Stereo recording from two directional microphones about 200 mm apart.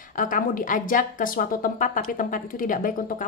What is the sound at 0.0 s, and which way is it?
A woman's voice, 40° left (ahead or behind).